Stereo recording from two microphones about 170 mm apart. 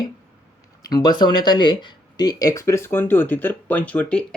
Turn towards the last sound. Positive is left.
turn(degrees=5)  # may be behind; listen again after turning